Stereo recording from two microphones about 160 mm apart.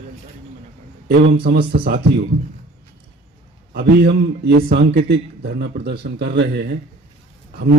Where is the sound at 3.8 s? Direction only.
90° right.